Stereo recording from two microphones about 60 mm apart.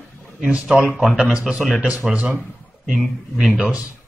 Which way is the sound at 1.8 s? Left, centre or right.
Right.